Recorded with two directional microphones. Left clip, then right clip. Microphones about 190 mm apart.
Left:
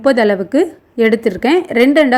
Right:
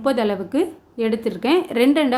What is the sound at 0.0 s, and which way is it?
A woman's voice, 25° left (ahead or behind).